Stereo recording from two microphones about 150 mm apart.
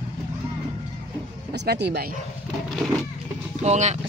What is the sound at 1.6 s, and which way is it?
Speech, 90° right.